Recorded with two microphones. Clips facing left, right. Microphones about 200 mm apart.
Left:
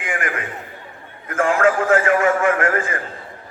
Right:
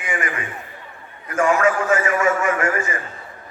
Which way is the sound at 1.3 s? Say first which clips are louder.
Left 1 dB; 55° left (ahead or behind).